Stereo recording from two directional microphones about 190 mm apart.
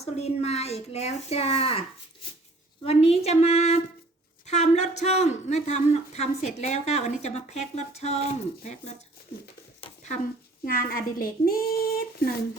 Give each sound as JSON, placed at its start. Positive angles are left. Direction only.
{"t": 0.0, "sound": "speech", "side_deg": 35}
{"t": 2.8, "sound": "speech", "side_deg": 30}
{"t": 9.8, "sound": "a sound", "side_deg": 30}
{"t": 10.7, "sound": "speech", "side_deg": 50}